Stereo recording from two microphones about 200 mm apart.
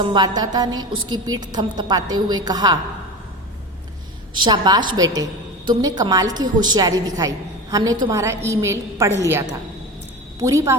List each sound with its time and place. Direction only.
0.0 s a woman's voice: 20° right (ahead or behind)
4.4 s a woman's voice: 20° right (ahead or behind)